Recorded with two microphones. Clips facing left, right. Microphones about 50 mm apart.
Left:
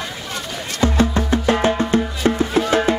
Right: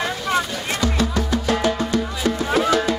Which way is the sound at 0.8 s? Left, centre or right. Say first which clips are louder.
Left 5 dB; left.